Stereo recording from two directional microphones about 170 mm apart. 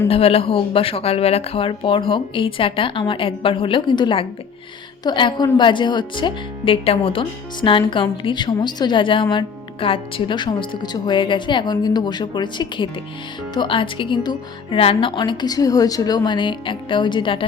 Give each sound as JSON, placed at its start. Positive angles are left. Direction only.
{"t": 0.1, "sound": "a woman's voice", "side_deg": 35}